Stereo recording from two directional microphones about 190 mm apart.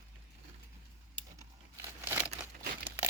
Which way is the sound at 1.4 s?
15° right (ahead or behind).